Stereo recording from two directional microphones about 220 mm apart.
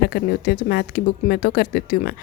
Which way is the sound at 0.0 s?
45° left (ahead or behind).